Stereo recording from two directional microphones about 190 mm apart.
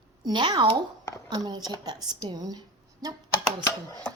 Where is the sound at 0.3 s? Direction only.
20° right (ahead or behind).